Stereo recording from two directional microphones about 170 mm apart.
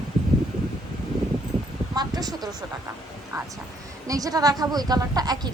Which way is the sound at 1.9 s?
25° right (ahead or behind).